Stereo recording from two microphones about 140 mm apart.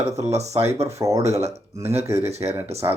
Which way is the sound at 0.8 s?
20° right (ahead or behind).